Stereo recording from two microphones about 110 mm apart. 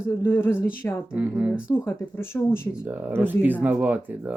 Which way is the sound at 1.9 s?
20° left (ahead or behind).